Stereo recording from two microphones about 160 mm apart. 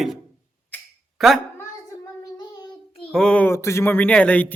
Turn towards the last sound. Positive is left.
turn(degrees=10)  # may be behind; listen again after turning